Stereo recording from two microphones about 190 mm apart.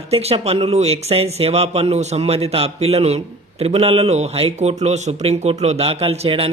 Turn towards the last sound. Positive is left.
turn(degrees=-30)  # may be behind; listen again after turning